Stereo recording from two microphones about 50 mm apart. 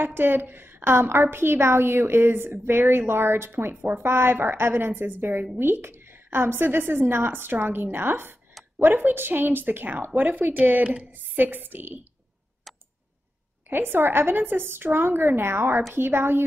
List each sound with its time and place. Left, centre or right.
0.0 s a woman's voice: right
12.7 s a sound: centre
13.7 s a woman's voice: right